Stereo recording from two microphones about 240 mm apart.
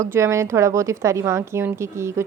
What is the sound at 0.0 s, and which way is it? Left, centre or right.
A woman's voice, centre.